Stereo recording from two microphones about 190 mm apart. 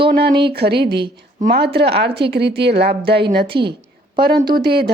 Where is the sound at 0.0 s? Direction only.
60° right (ahead or behind).